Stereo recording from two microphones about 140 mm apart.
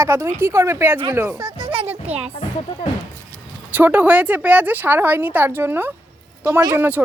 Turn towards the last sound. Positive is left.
turn(degrees=-15)  # may be behind; listen again after turning